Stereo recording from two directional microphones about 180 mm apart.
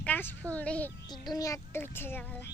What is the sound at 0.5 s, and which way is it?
A child's voice, 10° left (ahead or behind).